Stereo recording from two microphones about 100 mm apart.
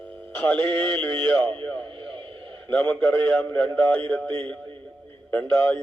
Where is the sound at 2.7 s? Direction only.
10° left (ahead or behind).